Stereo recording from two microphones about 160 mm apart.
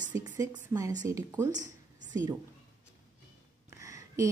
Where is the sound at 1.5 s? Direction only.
50° right (ahead or behind).